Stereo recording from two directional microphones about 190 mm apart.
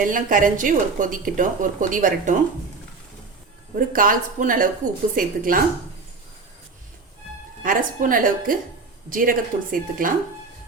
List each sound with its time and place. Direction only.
0.0 s a woman's voice: 45° right (ahead or behind)
3.8 s a woman's voice: 45° right (ahead or behind)
7.6 s a woman's voice: 45° right (ahead or behind)